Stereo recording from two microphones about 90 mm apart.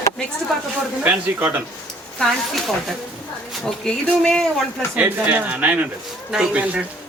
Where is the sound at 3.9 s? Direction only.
10° left (ahead or behind).